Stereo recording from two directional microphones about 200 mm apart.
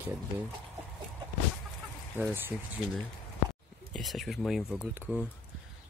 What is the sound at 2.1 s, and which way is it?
Speech, 10° right (ahead or behind).